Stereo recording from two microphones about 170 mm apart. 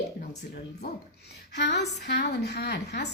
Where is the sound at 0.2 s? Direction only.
65° left (ahead or behind).